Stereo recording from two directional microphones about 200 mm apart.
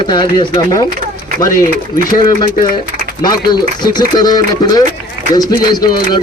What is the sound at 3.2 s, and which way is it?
Speech, 20° left (ahead or behind).